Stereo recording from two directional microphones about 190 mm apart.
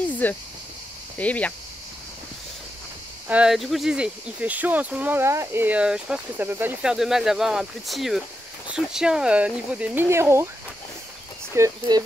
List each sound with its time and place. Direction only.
0.2 s speech: 10° left (ahead or behind)
3.3 s speech: 5° right (ahead or behind)
11.5 s speech: 15° right (ahead or behind)